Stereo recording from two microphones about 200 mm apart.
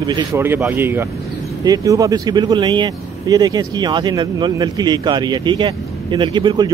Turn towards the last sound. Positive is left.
turn(degrees=-20)  # may be behind; listen again after turning